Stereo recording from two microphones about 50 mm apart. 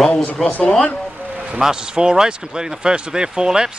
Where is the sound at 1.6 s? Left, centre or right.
Centre.